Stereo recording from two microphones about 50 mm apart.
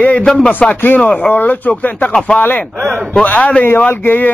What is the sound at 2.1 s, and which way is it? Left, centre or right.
A man's voice, left.